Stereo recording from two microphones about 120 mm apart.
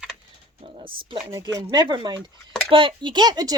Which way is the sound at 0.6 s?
45° right (ahead or behind).